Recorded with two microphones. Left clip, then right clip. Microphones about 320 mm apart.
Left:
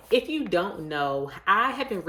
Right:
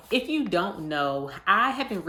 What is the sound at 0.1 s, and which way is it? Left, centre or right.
Speech, centre.